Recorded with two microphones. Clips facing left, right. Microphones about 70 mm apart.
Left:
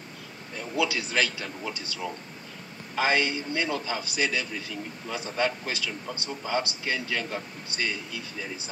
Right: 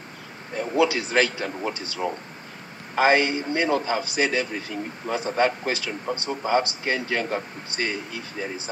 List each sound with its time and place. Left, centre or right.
0.6 s a sound: right
1.1 s speech: right
3.0 s a man's voice: right
3.4 s speech: right